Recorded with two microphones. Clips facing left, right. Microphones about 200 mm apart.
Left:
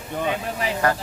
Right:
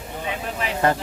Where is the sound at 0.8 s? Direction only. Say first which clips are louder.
Right 2 dB; 20° right (ahead or behind).